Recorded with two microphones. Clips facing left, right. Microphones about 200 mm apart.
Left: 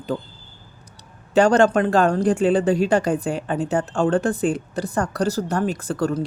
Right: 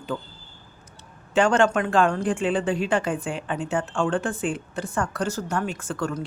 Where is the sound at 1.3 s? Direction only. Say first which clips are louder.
Left 4 dB; 40° left (ahead or behind).